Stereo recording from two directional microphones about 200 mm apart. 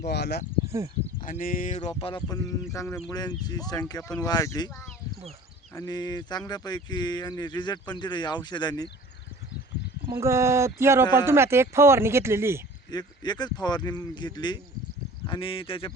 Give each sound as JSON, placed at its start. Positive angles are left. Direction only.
{"t": 0.0, "sound": "speech", "side_deg": 55}
{"t": 1.2, "sound": "speech", "side_deg": 40}
{"t": 1.8, "sound": "speech", "side_deg": 25}
{"t": 5.7, "sound": "speech", "side_deg": 20}
{"t": 10.1, "sound": "speech", "side_deg": -15}
{"t": 12.9, "sound": "speech", "side_deg": 20}